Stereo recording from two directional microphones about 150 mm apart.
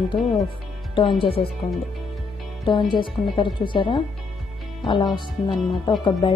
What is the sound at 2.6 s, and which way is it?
Speech, 30° left (ahead or behind).